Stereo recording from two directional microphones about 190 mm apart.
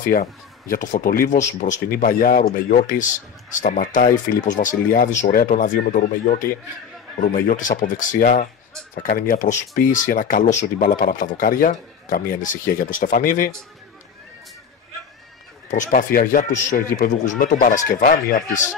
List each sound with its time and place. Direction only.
0.0 s speech: 50° left (ahead or behind)
15.7 s speech: 45° left (ahead or behind)